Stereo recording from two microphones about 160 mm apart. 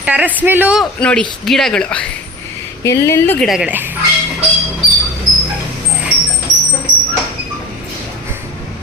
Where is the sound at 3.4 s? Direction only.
5° right (ahead or behind).